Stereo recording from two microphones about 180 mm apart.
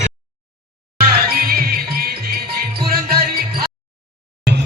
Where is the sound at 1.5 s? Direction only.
55° right (ahead or behind).